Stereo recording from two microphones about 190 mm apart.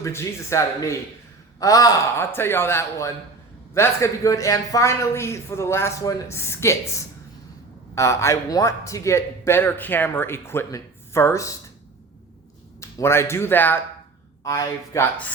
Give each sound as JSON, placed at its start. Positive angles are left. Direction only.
{"t": 0.0, "sound": "a man's voice", "side_deg": 15}
{"t": 7.9, "sound": "a man's voice", "side_deg": 15}
{"t": 12.8, "sound": "a man's voice", "side_deg": 15}